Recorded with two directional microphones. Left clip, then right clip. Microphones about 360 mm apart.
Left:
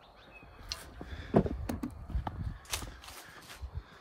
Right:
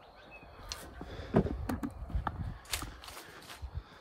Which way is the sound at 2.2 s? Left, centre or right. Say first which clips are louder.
Right 3 dB; centre.